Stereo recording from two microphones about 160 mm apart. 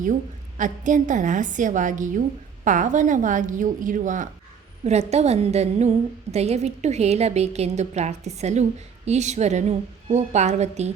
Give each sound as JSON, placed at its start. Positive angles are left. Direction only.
{"t": 0.0, "sound": "a woman's voice", "side_deg": -55}
{"t": 4.8, "sound": "a woman's voice", "side_deg": -45}